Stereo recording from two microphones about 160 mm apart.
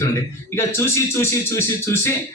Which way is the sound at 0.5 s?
15° left (ahead or behind).